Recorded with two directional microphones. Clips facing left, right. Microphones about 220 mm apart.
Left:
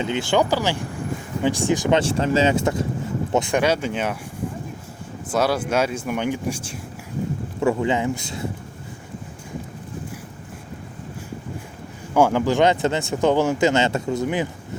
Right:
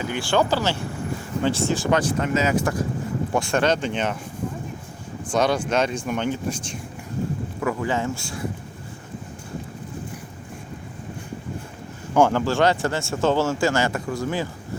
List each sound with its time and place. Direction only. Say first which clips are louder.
0.0 s speech: left 2 dB; 20° left (ahead or behind)
5.3 s speech: even; 5° left (ahead or behind)
7.6 s speech: left 4 dB; 25° left (ahead or behind)
12.1 s speech: left 1 dB; 10° left (ahead or behind)